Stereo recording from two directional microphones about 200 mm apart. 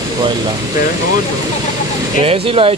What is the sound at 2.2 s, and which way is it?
Speech, 30° right (ahead or behind).